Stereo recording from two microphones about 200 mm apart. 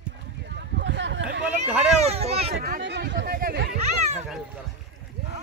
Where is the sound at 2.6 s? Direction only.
55° right (ahead or behind).